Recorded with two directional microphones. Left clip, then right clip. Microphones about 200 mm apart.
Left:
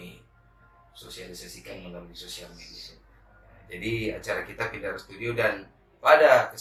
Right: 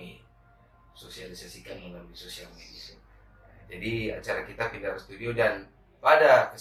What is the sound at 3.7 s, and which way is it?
A man's voice, 15° left (ahead or behind).